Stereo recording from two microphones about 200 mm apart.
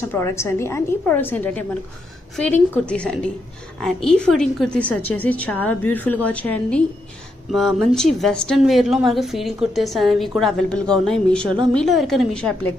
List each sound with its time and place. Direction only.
0.1 s a woman's voice: 15° left (ahead or behind)